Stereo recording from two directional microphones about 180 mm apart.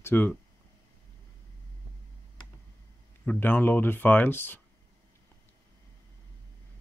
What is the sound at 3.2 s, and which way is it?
Speech, 10° left (ahead or behind).